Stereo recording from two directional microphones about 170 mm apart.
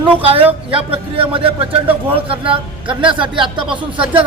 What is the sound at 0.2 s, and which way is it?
A man's voice, 35° right (ahead or behind).